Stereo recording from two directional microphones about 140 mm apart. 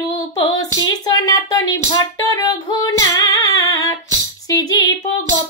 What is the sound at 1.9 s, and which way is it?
Female singing, 25° left (ahead or behind).